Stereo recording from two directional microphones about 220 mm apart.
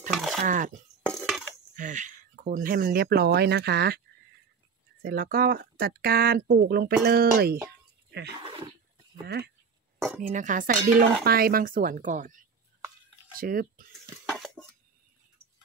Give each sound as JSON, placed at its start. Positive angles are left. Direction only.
{"t": 0.1, "sound": "speech", "side_deg": 0}
{"t": 0.4, "sound": "speech", "side_deg": -35}
{"t": 5.0, "sound": "speech", "side_deg": -40}
{"t": 10.2, "sound": "speech", "side_deg": -35}
{"t": 14.2, "sound": "a sound", "side_deg": 0}